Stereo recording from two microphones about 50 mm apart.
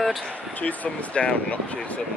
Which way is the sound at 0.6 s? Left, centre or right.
Left.